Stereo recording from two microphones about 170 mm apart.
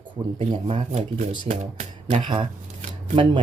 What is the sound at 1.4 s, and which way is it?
Speech, 40° right (ahead or behind).